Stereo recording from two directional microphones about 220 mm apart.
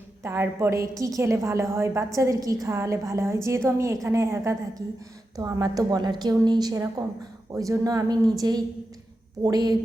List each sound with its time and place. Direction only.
0.2 s a woman's voice: 10° right (ahead or behind)